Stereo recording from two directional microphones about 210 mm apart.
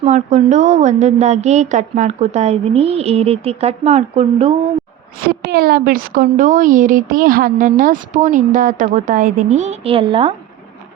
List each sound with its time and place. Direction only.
0.0 s a woman's voice: 35° right (ahead or behind)
5.3 s a woman's voice: 45° right (ahead or behind); by 10.3 s 25° right (ahead or behind)